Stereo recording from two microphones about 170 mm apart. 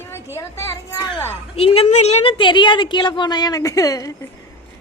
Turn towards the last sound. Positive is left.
turn(degrees=20)  # may be behind; listen again after turning